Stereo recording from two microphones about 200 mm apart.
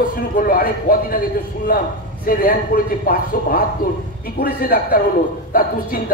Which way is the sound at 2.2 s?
45° left (ahead or behind).